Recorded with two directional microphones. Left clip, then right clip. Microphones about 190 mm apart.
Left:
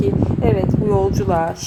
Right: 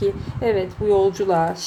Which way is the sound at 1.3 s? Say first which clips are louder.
Left 1 dB; 15° left (ahead or behind).